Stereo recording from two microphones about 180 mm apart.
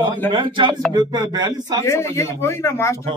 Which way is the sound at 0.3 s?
25° right (ahead or behind).